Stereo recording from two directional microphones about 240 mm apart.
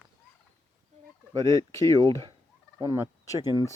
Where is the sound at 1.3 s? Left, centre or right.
Centre.